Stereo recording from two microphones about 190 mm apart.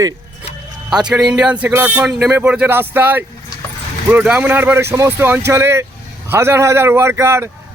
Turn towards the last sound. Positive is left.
turn(degrees=-15)  # may be behind; listen again after turning